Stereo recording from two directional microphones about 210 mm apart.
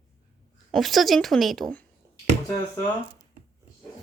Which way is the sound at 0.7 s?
Centre (ahead or behind).